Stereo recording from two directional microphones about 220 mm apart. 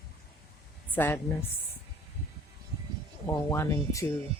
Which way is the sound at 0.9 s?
10° left (ahead or behind).